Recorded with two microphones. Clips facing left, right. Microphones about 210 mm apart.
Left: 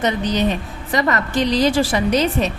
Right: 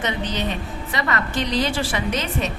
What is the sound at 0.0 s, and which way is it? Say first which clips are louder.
A woman's voice: left 6 dB; 40° left (ahead or behind).